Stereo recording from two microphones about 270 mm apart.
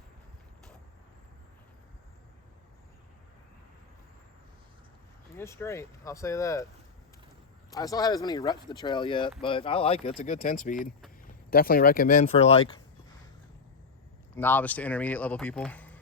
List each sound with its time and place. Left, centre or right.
5.4 s speech: centre
7.7 s speech: centre
14.3 s speech: centre